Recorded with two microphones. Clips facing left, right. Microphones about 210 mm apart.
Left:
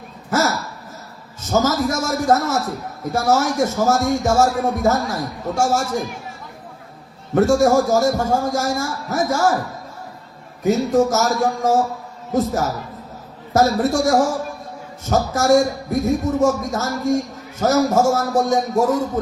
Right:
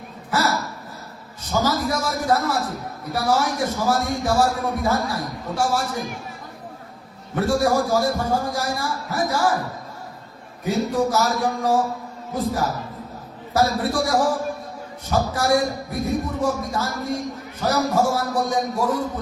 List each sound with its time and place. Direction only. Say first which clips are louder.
0.3 s hiccup: left 3 dB; 45° left (ahead or behind)
1.4 s a man's voice: left 4 dB; 45° left (ahead or behind)
7.3 s a man's voice: left 5 dB; 45° left (ahead or behind)
10.6 s a man's voice: left 5 dB; 45° left (ahead or behind)